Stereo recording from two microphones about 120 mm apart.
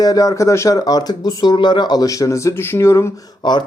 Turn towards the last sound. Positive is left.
turn(degrees=40)  # may be behind; listen again after turning